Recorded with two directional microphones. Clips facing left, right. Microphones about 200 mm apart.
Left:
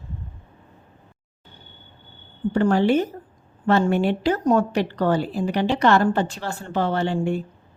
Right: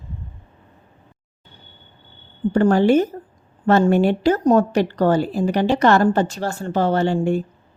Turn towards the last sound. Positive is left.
turn(degrees=-40)  # may be behind; listen again after turning